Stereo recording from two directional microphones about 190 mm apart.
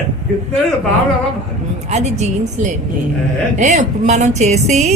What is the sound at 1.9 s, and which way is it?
Speech, 35° right (ahead or behind).